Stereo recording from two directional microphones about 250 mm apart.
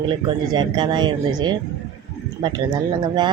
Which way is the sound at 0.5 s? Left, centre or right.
Centre.